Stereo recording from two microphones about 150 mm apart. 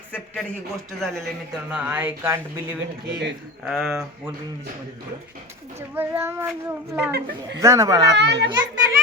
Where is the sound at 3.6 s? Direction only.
Centre (ahead or behind).